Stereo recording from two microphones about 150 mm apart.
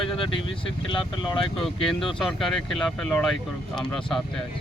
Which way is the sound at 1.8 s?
Centre (ahead or behind).